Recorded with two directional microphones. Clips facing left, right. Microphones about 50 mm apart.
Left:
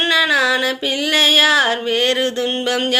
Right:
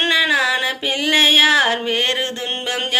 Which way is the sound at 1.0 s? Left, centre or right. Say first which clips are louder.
Even; right.